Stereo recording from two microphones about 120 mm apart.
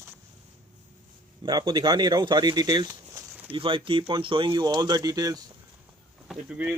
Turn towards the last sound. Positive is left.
turn(degrees=-10)  # may be behind; listen again after turning